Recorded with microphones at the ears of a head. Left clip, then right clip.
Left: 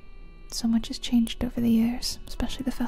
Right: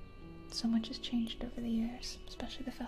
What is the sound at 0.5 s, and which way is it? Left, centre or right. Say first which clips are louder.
A woman's voice: left 8 dB; left.